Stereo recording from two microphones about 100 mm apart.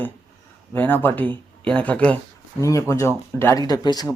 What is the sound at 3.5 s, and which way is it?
Speech, 40° left (ahead or behind).